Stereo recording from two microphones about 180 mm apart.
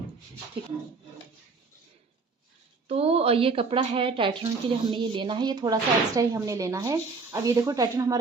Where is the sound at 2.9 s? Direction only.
35° right (ahead or behind).